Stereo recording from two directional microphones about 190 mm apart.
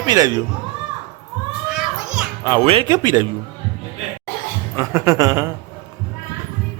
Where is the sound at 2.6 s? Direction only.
30° right (ahead or behind).